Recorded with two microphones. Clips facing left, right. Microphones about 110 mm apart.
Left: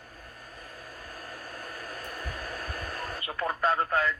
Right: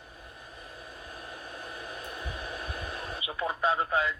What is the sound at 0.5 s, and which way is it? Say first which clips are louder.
Hair dryer: left 1 dB; 25° right (ahead or behind).